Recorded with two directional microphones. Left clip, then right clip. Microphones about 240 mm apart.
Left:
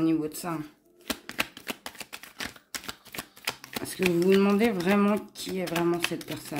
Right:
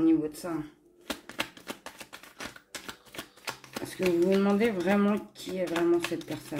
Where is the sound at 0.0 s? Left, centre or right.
Left.